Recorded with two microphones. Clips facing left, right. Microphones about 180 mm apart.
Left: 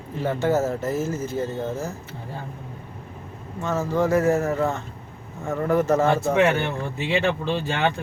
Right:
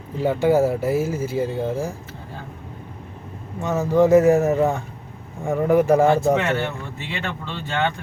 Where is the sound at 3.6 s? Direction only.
15° right (ahead or behind).